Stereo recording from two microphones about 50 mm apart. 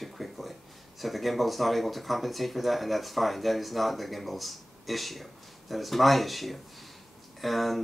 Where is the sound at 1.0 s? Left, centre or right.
Centre.